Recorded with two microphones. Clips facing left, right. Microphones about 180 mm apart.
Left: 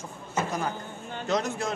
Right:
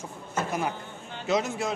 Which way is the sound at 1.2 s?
5° right (ahead or behind).